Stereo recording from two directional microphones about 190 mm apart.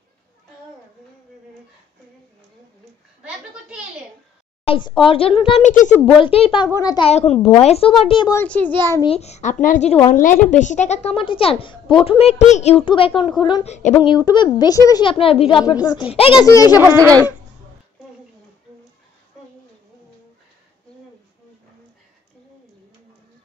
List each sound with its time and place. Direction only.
4.6 s a woman's voice: 25° left (ahead or behind)
5.7 s speech: 40° left (ahead or behind)
6.1 s a woman's voice: 30° left (ahead or behind)
7.1 s a child's voice: 35° left (ahead or behind)
8.4 s a child's voice: 10° left (ahead or behind)
9.0 s a child's voice: 35° left (ahead or behind)
13.7 s a child's voice: 40° left (ahead or behind)
14.0 s a woman's voice: 20° left (ahead or behind)
15.6 s a woman's voice: 20° left (ahead or behind)
16.1 s a child's voice: 30° left (ahead or behind)
16.4 s a child's voice: 20° left (ahead or behind)
16.8 s speech: 15° right (ahead or behind)